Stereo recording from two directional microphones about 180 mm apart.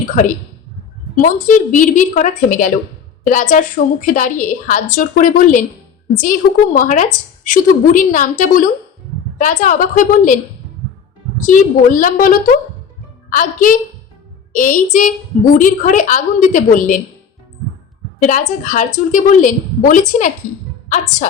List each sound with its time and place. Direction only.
1.1 s a woman's voice: 45° left (ahead or behind)
11.3 s a woman's voice: 45° left (ahead or behind)
18.2 s a woman's voice: 45° left (ahead or behind)